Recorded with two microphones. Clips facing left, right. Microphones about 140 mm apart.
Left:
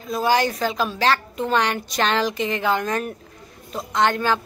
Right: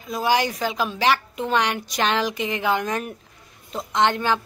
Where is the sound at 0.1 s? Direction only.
15° right (ahead or behind).